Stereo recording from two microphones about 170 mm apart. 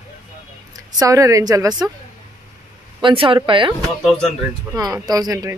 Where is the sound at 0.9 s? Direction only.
20° right (ahead or behind).